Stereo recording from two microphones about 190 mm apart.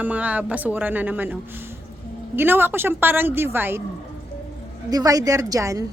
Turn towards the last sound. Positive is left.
turn(degrees=-15)  # may be behind; listen again after turning